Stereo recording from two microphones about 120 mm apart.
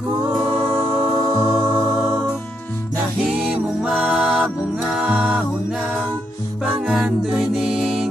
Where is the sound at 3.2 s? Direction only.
5° right (ahead or behind).